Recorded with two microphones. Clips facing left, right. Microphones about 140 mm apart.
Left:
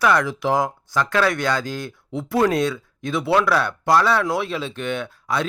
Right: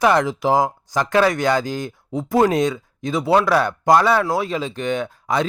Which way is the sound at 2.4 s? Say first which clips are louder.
Right 2 dB; 15° right (ahead or behind).